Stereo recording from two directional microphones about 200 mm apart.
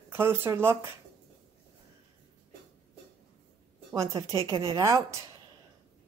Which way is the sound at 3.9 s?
15° right (ahead or behind).